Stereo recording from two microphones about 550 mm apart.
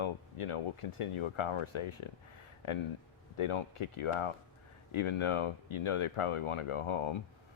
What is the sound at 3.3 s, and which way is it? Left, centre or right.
Speech, left.